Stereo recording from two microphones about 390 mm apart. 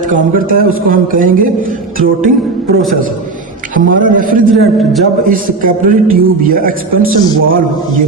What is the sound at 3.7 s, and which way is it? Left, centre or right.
A man's voice, right.